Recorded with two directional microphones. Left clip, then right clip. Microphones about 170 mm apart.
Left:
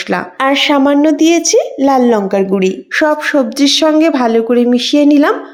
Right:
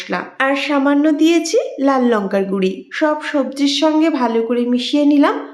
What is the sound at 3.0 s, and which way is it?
A woman's voice, 40° left (ahead or behind).